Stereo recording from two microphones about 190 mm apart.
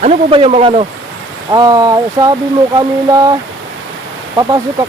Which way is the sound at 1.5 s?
20° right (ahead or behind).